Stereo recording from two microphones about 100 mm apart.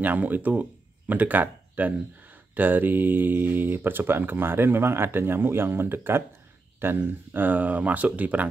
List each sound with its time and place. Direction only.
0.0 s speech: 15° right (ahead or behind)